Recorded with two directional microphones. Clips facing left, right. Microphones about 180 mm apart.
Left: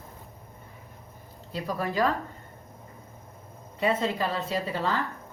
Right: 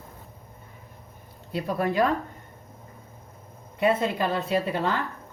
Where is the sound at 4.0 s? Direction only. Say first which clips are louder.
Right 2 dB; 60° right (ahead or behind).